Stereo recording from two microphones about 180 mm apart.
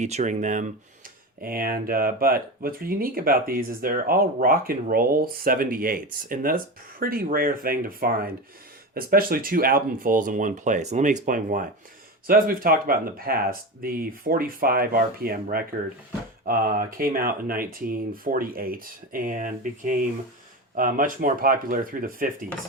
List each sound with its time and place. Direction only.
0.0 s speech: 40° right (ahead or behind)
1.4 s speech: 55° right (ahead or behind)